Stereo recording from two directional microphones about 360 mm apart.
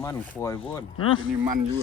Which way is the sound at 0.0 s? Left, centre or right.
Centre.